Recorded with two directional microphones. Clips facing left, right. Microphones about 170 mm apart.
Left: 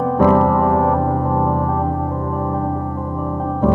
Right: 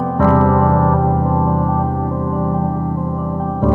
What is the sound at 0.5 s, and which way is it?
Music, 5° left (ahead or behind).